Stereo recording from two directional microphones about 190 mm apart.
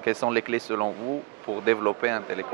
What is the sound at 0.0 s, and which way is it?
Speech, 10° right (ahead or behind).